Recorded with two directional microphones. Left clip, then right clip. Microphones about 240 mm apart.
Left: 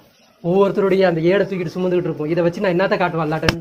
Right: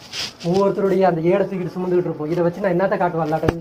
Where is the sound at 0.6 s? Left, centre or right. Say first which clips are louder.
Left 1 dB; left.